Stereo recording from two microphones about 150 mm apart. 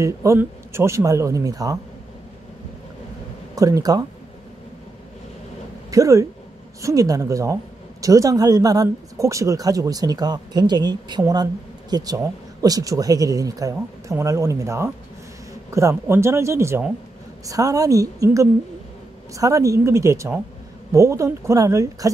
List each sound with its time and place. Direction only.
0.0 s speech: 20° right (ahead or behind)
3.5 s speech: 25° right (ahead or behind)
5.9 s speech: 20° right (ahead or behind)